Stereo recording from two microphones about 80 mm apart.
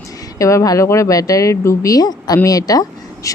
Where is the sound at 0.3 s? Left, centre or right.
Left.